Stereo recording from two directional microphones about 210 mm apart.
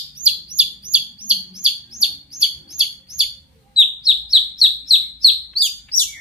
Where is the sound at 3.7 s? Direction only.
Centre (ahead or behind).